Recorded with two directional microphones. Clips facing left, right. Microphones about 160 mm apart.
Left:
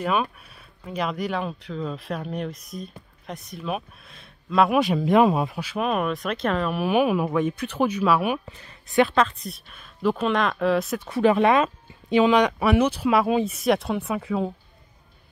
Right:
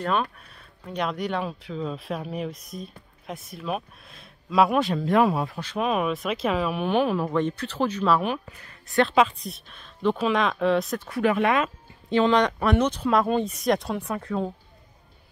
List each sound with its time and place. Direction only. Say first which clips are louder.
0.0 s speech: left 1 dB; 10° left (ahead or behind)
4.7 s speech: left 3 dB; 10° left (ahead or behind)
9.1 s speech: right 1 dB; centre (ahead or behind)
11.0 s speech: left 4 dB; 25° left (ahead or behind)
12.1 s speech: left 2 dB; 10° left (ahead or behind)